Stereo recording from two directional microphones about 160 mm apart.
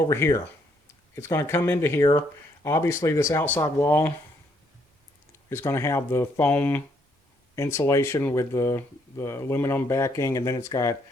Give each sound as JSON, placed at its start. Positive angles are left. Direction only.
{"t": 0.0, "sound": "speech", "side_deg": 15}
{"t": 5.5, "sound": "speech", "side_deg": 15}